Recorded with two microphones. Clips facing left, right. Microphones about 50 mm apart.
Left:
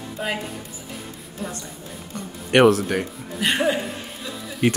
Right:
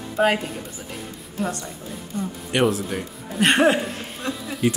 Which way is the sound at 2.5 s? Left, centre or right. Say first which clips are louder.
Left 6 dB; left.